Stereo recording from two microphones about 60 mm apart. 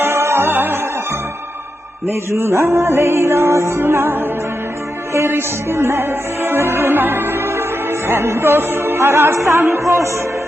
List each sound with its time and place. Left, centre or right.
0.0 s music: right
2.0 s music: right